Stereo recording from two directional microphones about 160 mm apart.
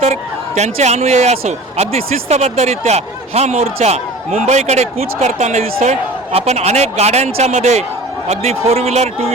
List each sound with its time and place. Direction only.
0.0 s a man's voice: 40° right (ahead or behind)